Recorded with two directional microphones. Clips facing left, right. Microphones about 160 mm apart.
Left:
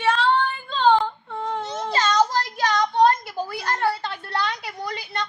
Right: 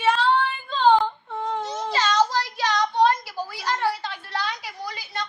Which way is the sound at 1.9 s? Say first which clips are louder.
Left 1 dB; 50° left (ahead or behind).